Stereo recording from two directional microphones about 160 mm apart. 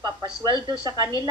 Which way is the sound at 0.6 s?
25° right (ahead or behind).